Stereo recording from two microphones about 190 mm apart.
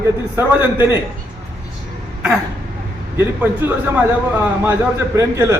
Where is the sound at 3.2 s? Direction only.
10° right (ahead or behind).